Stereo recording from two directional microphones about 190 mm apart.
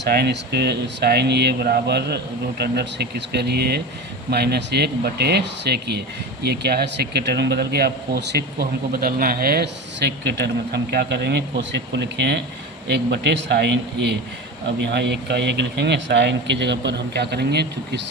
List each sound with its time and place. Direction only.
0.0 s a man's voice: 60° right (ahead or behind)